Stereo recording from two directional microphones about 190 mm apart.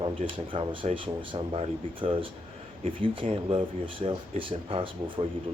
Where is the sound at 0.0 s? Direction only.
25° right (ahead or behind).